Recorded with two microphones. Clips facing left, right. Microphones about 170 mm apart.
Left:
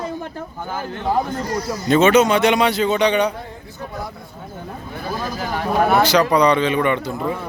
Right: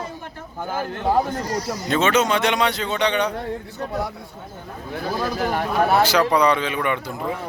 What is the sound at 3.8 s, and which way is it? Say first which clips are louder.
Speech: right 2 dB; 70° right (ahead or behind).